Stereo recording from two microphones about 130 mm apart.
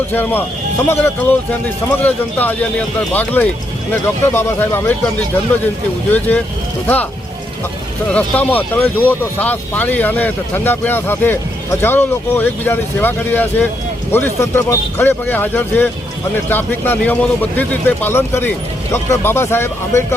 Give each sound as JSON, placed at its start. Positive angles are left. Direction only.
{"t": 0.1, "sound": "speech", "side_deg": 15}
{"t": 6.1, "sound": "speech", "side_deg": 15}
{"t": 8.1, "sound": "speech", "side_deg": 10}